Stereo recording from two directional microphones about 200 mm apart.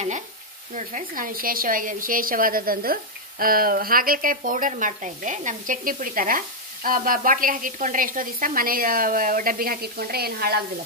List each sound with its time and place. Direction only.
0.7 s a woman's voice: 40° right (ahead or behind)